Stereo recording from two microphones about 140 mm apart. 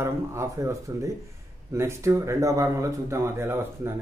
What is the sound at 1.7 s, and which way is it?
Mantra, 20° right (ahead or behind).